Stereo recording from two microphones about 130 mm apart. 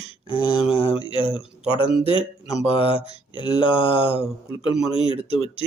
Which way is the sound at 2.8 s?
45° left (ahead or behind).